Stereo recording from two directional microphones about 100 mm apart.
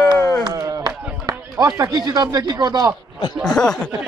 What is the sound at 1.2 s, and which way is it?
Speech, 35° right (ahead or behind).